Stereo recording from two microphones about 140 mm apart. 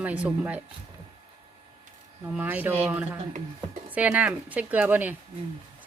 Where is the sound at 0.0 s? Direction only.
10° right (ahead or behind).